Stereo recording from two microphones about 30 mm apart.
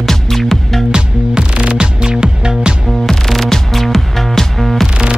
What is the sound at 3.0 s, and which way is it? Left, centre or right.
Music, centre.